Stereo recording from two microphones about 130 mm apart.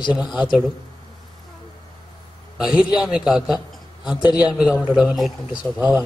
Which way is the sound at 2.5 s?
5° right (ahead or behind).